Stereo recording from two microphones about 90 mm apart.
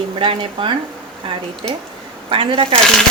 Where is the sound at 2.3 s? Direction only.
85° right.